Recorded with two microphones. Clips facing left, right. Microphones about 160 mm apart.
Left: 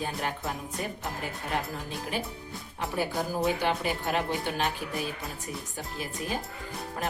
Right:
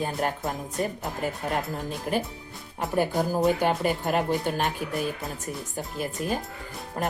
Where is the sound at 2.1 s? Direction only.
50° right (ahead or behind).